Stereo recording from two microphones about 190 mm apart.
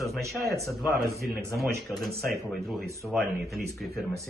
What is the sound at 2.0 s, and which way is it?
Speech, 50° right (ahead or behind).